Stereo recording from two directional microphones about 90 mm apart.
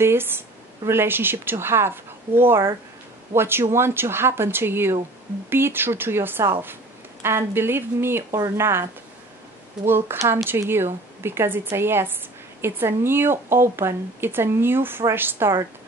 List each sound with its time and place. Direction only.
0.0 s speech: 25° right (ahead or behind)
9.8 s speech: 25° right (ahead or behind)